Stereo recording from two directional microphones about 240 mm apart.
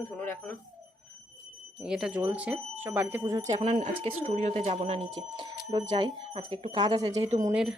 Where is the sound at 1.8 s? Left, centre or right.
Centre.